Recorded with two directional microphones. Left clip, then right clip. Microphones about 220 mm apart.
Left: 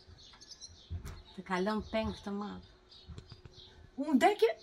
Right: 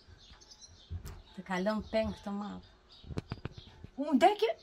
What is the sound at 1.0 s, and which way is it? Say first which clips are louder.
Speech: even; 45° right (ahead or behind).